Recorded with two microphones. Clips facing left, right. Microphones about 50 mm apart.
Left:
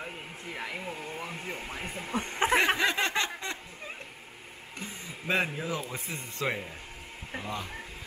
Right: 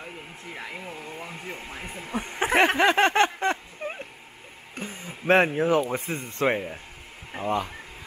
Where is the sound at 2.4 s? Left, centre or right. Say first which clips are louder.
Right 5 dB; right.